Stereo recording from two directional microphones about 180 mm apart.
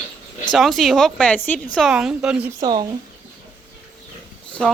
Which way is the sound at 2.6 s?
20° right (ahead or behind).